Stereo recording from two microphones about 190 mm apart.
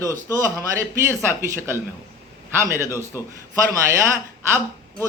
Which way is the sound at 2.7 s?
15° right (ahead or behind).